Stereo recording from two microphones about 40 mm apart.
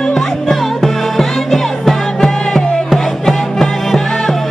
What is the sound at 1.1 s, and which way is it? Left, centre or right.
Music, centre.